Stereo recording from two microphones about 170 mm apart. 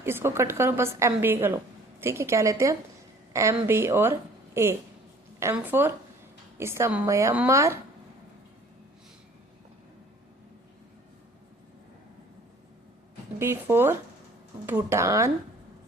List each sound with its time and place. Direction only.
0.0 s a woman's voice: 15° right (ahead or behind)
13.4 s a woman's voice: 15° right (ahead or behind)